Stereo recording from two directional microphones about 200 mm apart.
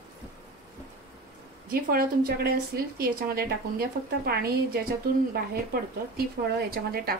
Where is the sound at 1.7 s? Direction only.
45° right (ahead or behind).